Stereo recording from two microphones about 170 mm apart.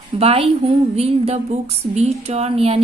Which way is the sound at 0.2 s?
35° right (ahead or behind).